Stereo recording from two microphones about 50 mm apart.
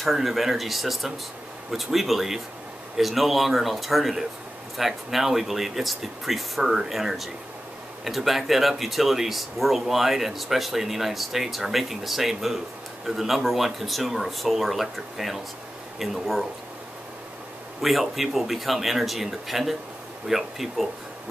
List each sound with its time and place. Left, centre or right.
0.0 s speech: centre
17.8 s speech: centre